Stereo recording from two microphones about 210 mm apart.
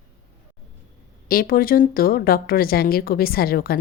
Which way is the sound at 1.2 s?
45° left (ahead or behind).